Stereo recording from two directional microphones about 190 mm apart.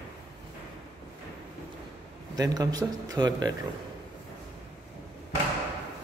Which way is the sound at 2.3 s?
20° right (ahead or behind).